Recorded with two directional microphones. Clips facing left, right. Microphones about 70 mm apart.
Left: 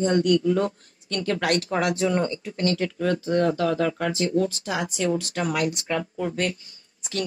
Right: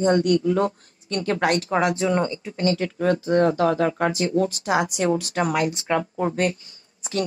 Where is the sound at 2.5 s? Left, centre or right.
Centre.